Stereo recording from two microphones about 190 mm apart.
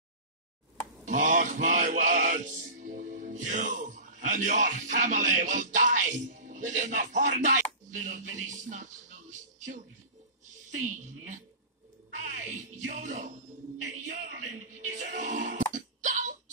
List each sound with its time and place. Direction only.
1.0 s music: 40° right (ahead or behind)
12.2 s speech: 40° right (ahead or behind)
13.8 s music: 40° right (ahead or behind)